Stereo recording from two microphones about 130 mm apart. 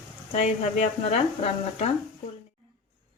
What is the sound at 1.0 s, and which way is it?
Speech, 55° left (ahead or behind).